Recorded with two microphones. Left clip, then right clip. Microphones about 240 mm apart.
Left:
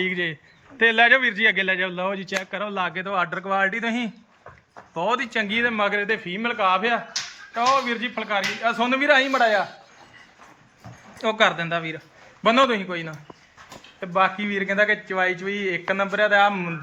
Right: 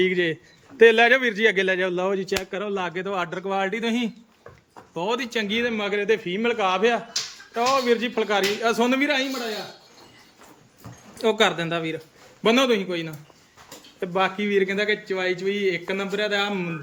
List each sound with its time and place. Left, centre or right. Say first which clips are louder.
0.0 s a man's voice: right 3 dB; centre
11.2 s a man's voice: even; centre